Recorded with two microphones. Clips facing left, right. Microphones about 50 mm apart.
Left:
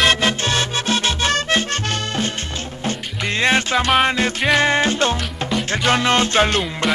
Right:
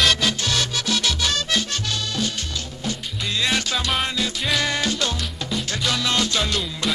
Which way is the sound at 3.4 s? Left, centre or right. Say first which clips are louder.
Left 7 dB; left.